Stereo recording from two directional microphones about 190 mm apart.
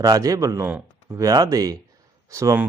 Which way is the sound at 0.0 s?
20° right (ahead or behind).